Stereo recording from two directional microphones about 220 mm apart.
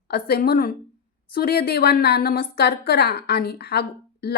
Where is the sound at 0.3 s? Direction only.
45° left (ahead or behind).